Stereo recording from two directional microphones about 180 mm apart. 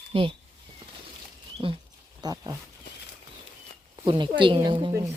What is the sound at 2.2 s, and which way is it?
Speech, 20° right (ahead or behind).